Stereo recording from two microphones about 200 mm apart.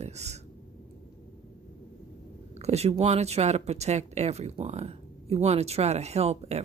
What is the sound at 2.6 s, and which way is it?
Speech, 30° right (ahead or behind).